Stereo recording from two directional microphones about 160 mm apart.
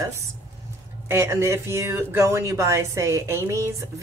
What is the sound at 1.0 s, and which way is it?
Speech, 15° right (ahead or behind).